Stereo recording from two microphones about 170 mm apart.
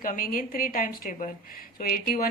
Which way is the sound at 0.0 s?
55° left (ahead or behind).